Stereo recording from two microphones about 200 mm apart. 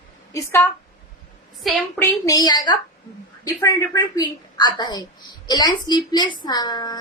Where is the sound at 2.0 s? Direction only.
15° left (ahead or behind).